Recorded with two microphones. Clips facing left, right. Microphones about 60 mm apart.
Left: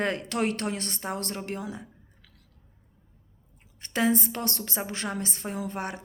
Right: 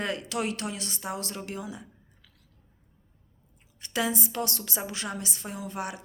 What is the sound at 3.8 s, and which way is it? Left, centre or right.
A woman's voice, left.